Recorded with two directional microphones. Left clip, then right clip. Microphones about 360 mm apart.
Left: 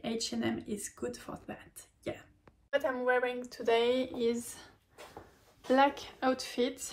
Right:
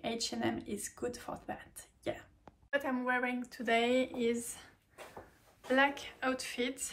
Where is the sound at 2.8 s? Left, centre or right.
Centre.